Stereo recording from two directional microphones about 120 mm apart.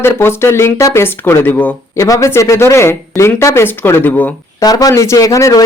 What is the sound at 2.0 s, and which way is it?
Speech, 25° left (ahead or behind).